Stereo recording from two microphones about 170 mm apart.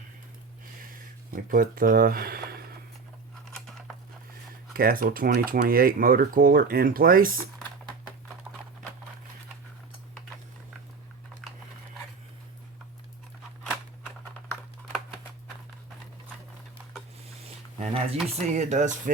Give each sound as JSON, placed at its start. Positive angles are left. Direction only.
{"t": 1.3, "sound": "speech", "side_deg": -55}
{"t": 3.5, "sound": "a sound", "side_deg": 5}
{"t": 4.7, "sound": "speech", "side_deg": -60}
{"t": 17.7, "sound": "speech", "side_deg": -40}